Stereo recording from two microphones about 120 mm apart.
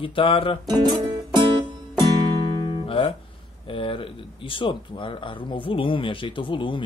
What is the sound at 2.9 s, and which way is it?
Speech, 45° left (ahead or behind).